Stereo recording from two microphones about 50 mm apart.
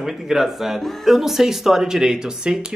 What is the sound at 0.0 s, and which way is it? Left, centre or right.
Speech, centre.